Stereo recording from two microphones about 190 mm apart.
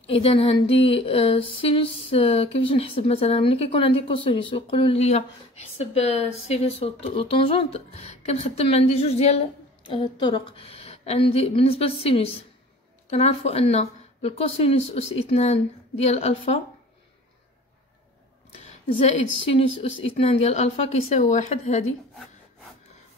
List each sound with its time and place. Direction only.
0.0 s a sound: 30° left (ahead or behind)
5.8 s speech: 35° left (ahead or behind)
18.6 s a woman's voice: 30° left (ahead or behind)